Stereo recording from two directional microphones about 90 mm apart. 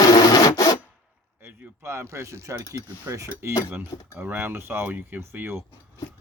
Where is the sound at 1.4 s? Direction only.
25° right (ahead or behind).